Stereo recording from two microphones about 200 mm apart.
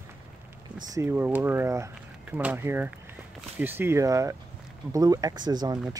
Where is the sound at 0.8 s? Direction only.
15° right (ahead or behind).